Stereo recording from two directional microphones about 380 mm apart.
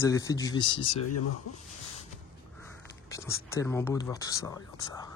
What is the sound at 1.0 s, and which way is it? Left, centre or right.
Speech, left.